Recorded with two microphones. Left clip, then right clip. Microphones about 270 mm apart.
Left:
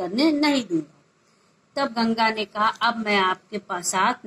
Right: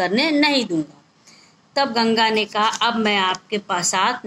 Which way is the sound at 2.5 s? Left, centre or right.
Right.